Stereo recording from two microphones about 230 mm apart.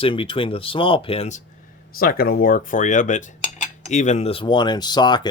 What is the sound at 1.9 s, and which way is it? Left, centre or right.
Speech, left.